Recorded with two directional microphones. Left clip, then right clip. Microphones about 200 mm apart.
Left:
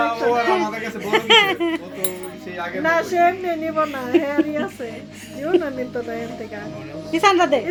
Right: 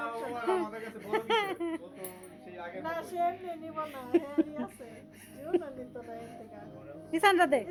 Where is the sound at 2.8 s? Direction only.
25° left (ahead or behind).